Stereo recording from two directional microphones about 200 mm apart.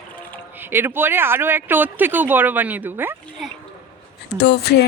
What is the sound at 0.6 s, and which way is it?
Speech, 10° right (ahead or behind).